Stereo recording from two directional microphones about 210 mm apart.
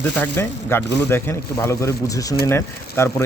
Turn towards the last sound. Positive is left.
turn(degrees=10)  # may be behind; listen again after turning